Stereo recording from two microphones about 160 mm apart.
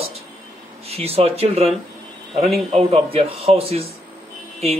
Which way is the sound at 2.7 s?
40° right (ahead or behind).